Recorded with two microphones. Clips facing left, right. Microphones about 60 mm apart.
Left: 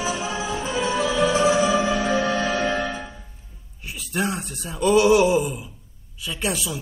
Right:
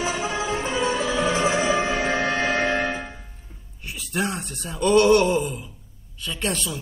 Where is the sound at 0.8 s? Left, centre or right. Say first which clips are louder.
Left 3 dB; right.